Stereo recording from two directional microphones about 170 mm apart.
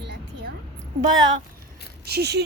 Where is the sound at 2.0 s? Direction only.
75° right (ahead or behind).